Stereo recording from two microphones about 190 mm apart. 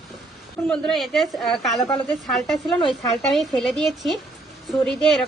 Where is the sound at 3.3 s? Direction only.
Centre (ahead or behind).